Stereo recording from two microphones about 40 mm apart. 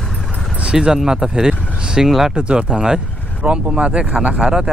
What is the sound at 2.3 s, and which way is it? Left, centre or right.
Speech, right.